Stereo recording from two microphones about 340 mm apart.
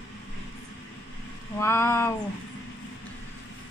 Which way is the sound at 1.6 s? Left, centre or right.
Centre.